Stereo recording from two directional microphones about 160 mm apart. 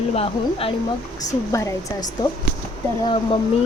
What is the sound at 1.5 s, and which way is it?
Speech, 20° left (ahead or behind).